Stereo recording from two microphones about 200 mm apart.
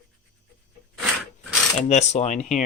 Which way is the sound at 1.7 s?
35° left (ahead or behind).